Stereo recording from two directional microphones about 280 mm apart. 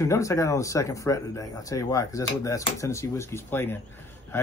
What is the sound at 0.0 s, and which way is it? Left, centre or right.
Speech, centre.